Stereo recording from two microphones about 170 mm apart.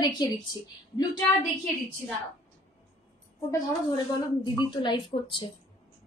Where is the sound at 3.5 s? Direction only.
25° left (ahead or behind).